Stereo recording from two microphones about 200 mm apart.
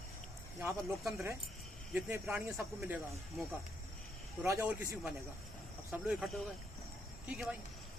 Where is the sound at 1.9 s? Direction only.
5° right (ahead or behind).